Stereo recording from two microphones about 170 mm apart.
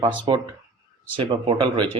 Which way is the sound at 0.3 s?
30° right (ahead or behind).